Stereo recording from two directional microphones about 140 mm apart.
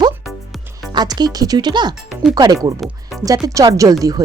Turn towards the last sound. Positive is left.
turn(degrees=-25)  # may be behind; listen again after turning